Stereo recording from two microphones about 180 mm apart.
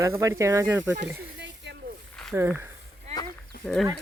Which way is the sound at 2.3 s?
15° right (ahead or behind).